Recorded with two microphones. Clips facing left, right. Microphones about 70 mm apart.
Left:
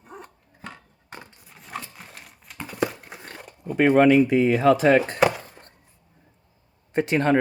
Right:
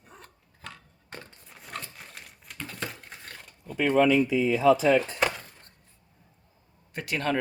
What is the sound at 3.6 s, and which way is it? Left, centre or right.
Speech, left.